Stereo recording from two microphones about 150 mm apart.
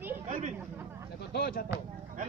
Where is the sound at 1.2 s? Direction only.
85° left.